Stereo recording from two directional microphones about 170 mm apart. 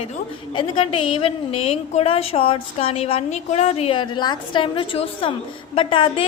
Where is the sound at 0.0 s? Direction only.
35° left (ahead or behind).